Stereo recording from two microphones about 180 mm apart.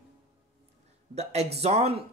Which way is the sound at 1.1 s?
35° right (ahead or behind).